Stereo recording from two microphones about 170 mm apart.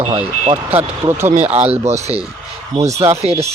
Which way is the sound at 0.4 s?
35° right (ahead or behind).